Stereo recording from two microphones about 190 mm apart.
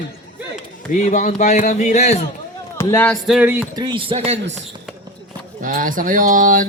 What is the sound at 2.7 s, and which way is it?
Speech, 10° left (ahead or behind).